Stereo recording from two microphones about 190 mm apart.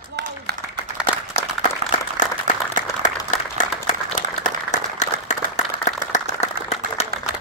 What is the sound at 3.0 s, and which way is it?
Applause, 40° left (ahead or behind).